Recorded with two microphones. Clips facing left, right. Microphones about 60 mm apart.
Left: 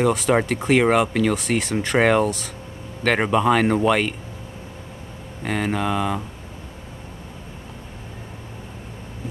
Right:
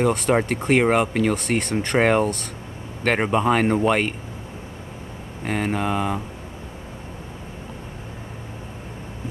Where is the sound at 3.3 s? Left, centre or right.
Centre.